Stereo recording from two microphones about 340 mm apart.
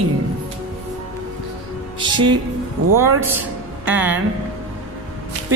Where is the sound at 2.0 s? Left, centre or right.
Centre.